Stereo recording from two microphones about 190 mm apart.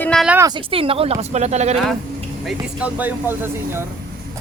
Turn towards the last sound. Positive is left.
turn(degrees=-10)  # may be behind; listen again after turning